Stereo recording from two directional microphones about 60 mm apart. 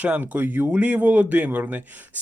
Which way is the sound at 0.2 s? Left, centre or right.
Right.